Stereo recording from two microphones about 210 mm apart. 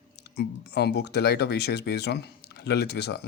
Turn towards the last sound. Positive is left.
turn(degrees=50)  # may be behind; listen again after turning